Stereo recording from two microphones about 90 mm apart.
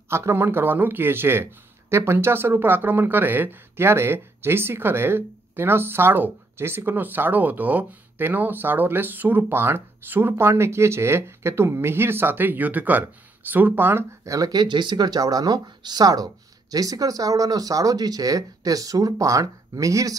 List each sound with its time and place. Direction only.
0.1 s speech: 30° right (ahead or behind)
14.2 s speech: 40° right (ahead or behind)